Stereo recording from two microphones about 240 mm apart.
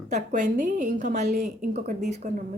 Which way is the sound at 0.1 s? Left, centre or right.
Right.